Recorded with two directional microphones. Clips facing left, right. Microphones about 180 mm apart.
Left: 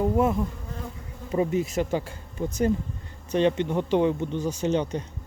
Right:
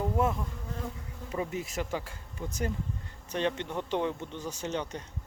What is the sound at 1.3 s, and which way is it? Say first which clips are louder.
Speech: left 10 dB; 25° left (ahead or behind).